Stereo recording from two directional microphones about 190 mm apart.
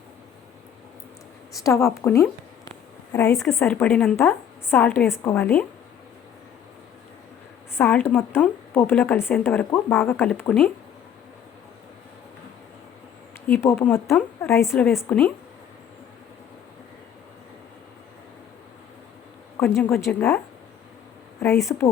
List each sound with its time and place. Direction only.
1.6 s a woman's voice: 15° left (ahead or behind)
3.3 s a woman's voice: 15° left (ahead or behind)
7.8 s a woman's voice: 10° left (ahead or behind)
13.5 s a woman's voice: 15° left (ahead or behind)
19.5 s a woman's voice: 10° left (ahead or behind)
21.6 s a woman's voice: 15° left (ahead or behind)